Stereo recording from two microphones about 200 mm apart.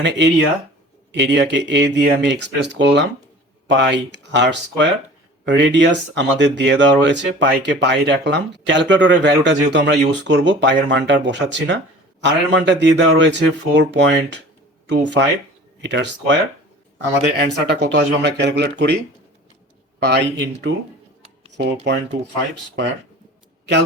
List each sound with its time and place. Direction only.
0.0 s speech: 60° right (ahead or behind)
20.1 s speech: 60° right (ahead or behind)
21.9 s speech: 60° right (ahead or behind)